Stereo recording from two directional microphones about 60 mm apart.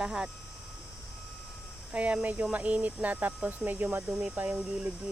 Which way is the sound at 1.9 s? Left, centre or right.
Right.